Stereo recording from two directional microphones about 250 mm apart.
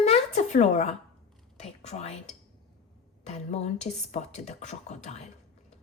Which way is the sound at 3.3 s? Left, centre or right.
Left.